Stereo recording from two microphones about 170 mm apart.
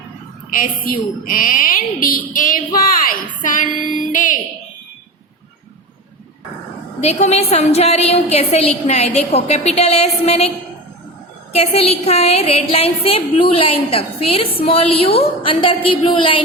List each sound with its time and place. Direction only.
0.5 s a woman's voice: 55° left (ahead or behind)
7.0 s a woman's voice: 40° left (ahead or behind)
11.5 s a woman's voice: 35° left (ahead or behind)